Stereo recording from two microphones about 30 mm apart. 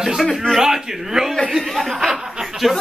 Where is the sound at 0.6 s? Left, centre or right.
Centre.